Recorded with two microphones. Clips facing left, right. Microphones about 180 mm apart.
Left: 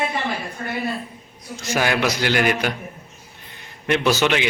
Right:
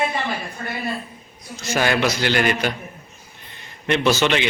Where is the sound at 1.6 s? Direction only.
10° left (ahead or behind).